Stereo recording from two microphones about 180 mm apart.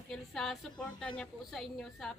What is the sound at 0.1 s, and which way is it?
A woman's voice, centre (ahead or behind).